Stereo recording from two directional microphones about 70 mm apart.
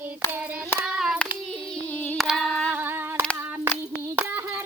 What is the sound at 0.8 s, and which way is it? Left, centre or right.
Hands, centre.